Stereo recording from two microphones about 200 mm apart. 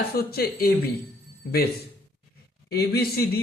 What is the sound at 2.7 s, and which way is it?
Speech, 50° left (ahead or behind).